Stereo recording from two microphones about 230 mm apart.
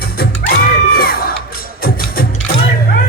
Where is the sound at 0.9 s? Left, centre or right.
Left.